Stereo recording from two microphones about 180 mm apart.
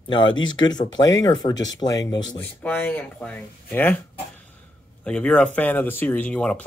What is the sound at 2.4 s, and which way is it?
Speech, 10° left (ahead or behind).